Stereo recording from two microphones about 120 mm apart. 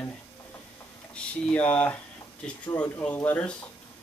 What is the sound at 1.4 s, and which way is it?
Speech, 10° left (ahead or behind).